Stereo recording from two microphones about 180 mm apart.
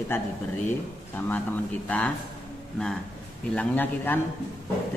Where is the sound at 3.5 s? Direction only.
10° left (ahead or behind).